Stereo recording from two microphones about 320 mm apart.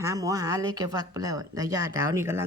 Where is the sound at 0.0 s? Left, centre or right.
Centre.